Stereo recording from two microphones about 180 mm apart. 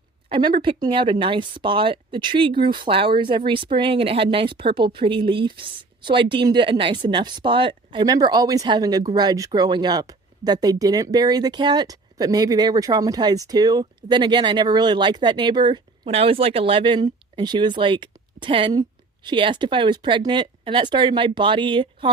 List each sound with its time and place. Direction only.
0.3 s speech: 30° right (ahead or behind)